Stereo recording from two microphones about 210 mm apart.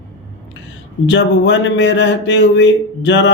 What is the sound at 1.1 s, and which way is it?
Speech, 60° left (ahead or behind).